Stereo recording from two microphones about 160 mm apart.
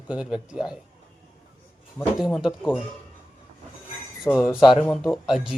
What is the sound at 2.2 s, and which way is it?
Speech, centre (ahead or behind).